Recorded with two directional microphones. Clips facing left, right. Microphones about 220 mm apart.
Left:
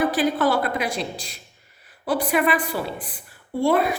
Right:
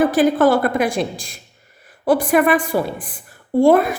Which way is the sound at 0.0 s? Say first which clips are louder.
Right 7 dB; 50° right (ahead or behind).